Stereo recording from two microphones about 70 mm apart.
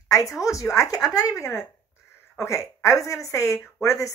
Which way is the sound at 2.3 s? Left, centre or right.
Left.